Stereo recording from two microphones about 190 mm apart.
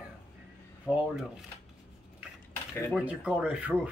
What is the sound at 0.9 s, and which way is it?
Speech, centre (ahead or behind).